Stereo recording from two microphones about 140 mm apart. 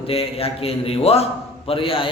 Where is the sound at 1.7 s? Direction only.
40° left (ahead or behind).